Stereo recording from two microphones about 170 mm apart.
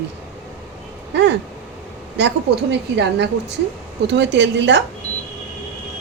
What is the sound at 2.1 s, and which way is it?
A woman's voice, 90° right.